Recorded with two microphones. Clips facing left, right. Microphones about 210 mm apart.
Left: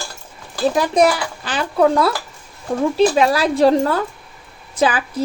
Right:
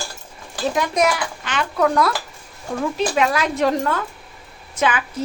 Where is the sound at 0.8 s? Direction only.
35° left (ahead or behind).